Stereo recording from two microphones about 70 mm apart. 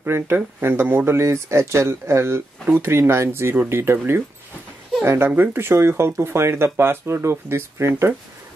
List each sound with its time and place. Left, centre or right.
0.0 s speech: right